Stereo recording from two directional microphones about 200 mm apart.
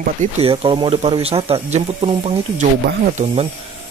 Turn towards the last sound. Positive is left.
turn(degrees=-30)  # may be behind; listen again after turning